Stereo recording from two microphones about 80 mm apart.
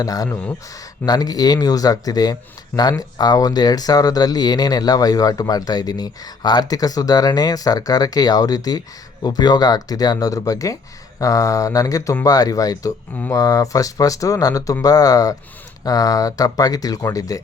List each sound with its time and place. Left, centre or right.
0.0 s speech: left